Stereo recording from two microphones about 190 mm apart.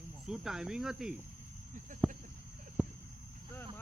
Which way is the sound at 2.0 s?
Centre (ahead or behind).